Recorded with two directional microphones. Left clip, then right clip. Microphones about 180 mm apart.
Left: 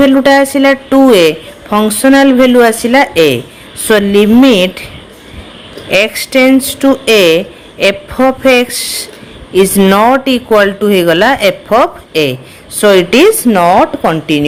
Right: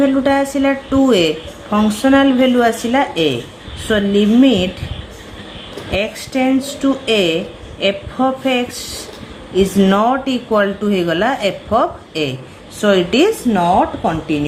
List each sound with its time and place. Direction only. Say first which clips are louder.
0.0 s a woman's voice: left 8 dB; 40° left (ahead or behind)
5.9 s a woman's voice: left 10 dB; 45° left (ahead or behind)